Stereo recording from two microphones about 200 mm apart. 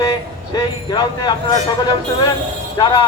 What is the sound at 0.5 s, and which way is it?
Speech, 20° left (ahead or behind).